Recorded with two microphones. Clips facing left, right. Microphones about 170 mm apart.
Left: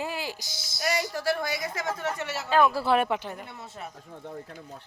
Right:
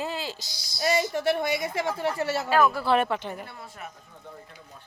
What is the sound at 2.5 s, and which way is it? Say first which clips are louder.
Speech: left 1 dB; 5° right (ahead or behind).